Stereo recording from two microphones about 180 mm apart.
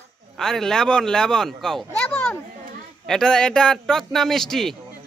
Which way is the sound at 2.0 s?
5° left (ahead or behind).